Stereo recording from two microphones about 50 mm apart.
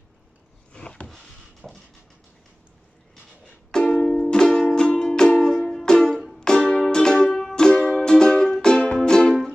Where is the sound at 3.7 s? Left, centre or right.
Centre.